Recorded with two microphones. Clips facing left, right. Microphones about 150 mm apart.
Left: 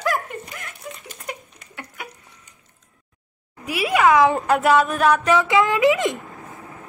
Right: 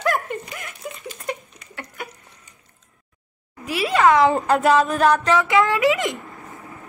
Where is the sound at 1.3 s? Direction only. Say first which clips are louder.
Right 4 dB; 10° left (ahead or behind).